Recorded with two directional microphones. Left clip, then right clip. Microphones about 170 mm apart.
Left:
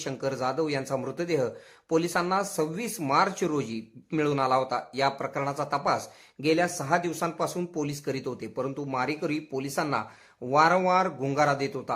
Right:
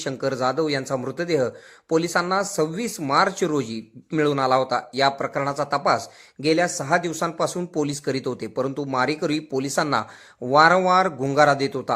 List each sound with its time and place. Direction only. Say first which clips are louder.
0.0 s speech: right 6 dB; 20° right (ahead or behind)